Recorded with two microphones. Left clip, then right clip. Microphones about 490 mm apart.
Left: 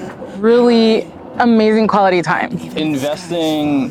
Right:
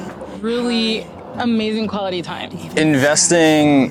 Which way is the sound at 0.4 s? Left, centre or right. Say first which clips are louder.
Left 9 dB; left.